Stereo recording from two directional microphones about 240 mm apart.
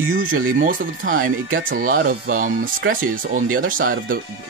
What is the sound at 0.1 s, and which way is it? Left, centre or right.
Speech, right.